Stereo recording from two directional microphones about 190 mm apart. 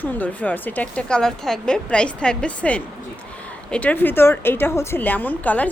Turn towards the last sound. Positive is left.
turn(degrees=10)  # may be behind; listen again after turning